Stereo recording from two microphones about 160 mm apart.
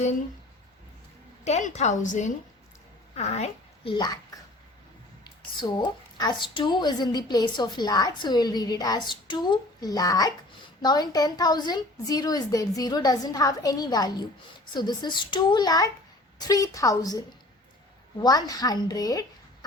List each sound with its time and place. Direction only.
1.5 s a woman's voice: 45° left (ahead or behind)
3.9 s a woman's voice: 25° left (ahead or behind)
5.5 s a woman's voice: 30° left (ahead or behind)